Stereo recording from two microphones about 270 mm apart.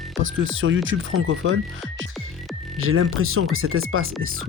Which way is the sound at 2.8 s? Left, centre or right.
Right.